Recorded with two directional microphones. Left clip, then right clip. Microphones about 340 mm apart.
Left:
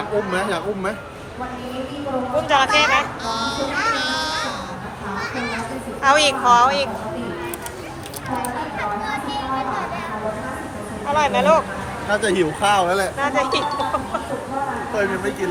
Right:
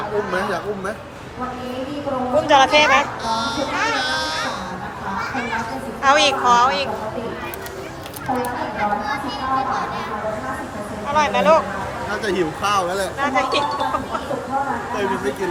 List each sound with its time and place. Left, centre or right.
2.5 s a woman's voice: centre
3.2 s a sound: centre
6.0 s a woman's voice: centre
11.1 s speech: centre
12.2 s speech: centre
13.1 s speech: centre